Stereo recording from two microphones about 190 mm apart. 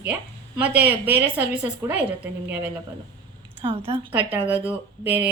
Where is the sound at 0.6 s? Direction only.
10° right (ahead or behind).